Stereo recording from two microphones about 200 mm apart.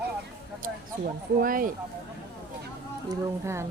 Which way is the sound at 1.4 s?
45° right (ahead or behind).